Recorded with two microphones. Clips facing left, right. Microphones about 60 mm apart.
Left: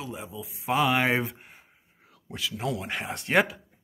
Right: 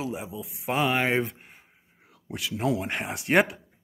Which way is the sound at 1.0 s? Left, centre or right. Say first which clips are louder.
Even; centre.